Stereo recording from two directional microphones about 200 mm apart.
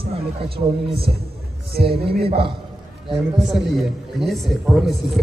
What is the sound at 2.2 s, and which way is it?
Speech, 30° right (ahead or behind).